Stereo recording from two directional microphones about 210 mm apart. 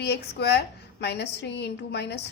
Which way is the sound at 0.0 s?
50° left (ahead or behind).